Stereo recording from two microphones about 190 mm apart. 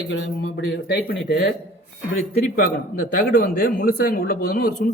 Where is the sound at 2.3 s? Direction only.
45° left (ahead or behind).